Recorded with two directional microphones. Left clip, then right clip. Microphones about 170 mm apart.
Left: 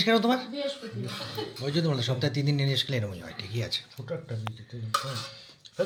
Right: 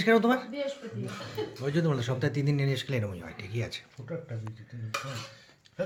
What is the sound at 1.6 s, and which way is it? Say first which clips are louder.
Speech: left 1 dB; 5° right (ahead or behind).